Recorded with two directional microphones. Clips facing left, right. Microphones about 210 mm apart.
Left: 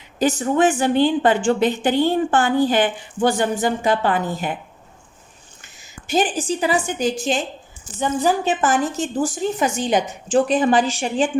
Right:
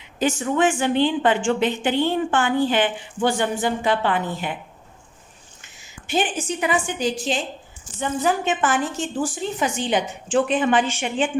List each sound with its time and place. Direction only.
0.2 s a woman's voice: 35° left (ahead or behind)
6.1 s a woman's voice: 40° left (ahead or behind)
7.9 s a woman's voice: 35° left (ahead or behind)